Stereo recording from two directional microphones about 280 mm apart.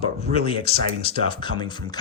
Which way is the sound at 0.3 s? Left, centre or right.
Centre.